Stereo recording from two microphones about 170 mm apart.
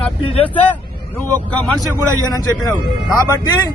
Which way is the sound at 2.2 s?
20° left (ahead or behind).